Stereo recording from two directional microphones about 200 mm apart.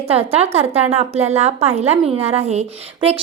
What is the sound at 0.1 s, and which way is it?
A woman's voice, 30° right (ahead or behind).